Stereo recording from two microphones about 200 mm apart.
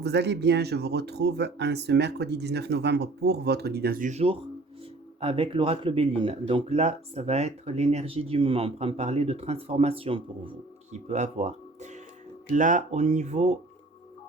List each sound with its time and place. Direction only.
0.0 s speech: 55° right (ahead or behind); by 13.6 s 35° right (ahead or behind)